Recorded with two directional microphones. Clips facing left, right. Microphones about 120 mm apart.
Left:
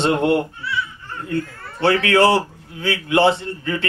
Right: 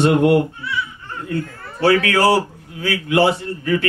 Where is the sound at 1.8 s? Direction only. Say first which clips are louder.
Even; 25° left (ahead or behind).